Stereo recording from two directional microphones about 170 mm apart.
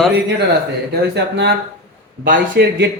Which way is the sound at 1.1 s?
80° right.